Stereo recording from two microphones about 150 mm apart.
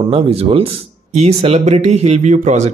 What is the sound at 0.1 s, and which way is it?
Speech, 40° right (ahead or behind).